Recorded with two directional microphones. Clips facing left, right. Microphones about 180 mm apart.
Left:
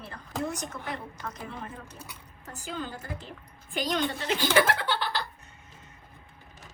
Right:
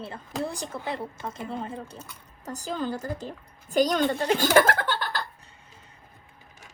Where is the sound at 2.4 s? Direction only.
40° right (ahead or behind).